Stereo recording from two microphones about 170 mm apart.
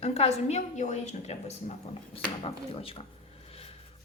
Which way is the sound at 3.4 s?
35° left (ahead or behind).